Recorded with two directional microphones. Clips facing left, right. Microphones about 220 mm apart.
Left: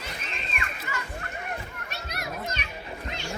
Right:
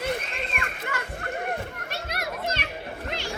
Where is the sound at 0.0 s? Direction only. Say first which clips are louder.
Right 9 dB; 55° right (ahead or behind).